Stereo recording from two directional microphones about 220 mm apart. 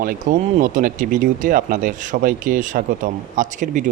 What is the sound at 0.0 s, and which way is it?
A man's voice, 40° right (ahead or behind).